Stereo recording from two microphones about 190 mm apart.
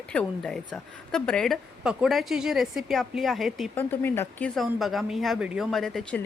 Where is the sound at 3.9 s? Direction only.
10° left (ahead or behind).